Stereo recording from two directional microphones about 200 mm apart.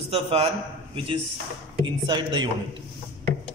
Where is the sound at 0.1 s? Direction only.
30° right (ahead or behind).